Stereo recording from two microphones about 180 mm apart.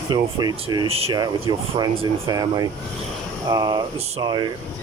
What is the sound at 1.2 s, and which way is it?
Speech, 20° right (ahead or behind).